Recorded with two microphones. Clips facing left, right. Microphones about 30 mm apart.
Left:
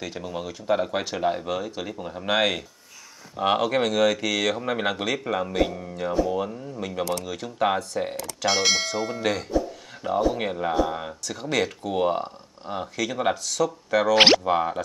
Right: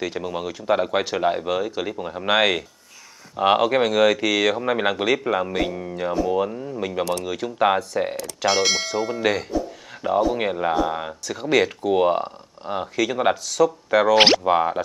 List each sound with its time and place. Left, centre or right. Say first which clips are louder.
0.0 s speech: right 5 dB; centre
8.2 s speech: right 2 dB; centre
14.1 s speech: even; centre
14.4 s speech: right 4 dB; centre